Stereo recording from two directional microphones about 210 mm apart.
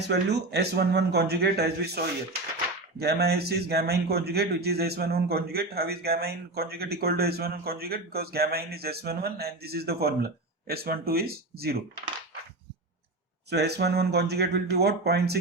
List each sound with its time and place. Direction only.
0.1 s a man's voice: 50° right (ahead or behind)
13.5 s a man's voice: 50° right (ahead or behind)